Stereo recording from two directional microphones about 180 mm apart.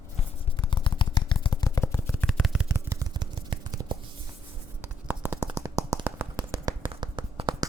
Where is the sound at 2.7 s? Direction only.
15° right (ahead or behind).